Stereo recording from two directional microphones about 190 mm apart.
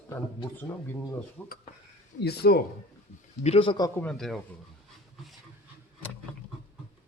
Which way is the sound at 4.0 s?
5° left (ahead or behind).